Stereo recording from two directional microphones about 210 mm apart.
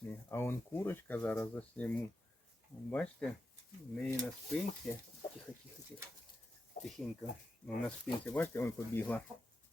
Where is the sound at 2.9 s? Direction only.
5° left (ahead or behind).